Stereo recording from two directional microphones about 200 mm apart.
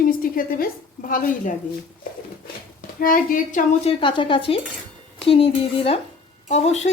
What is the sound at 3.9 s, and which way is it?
Speech, 25° left (ahead or behind).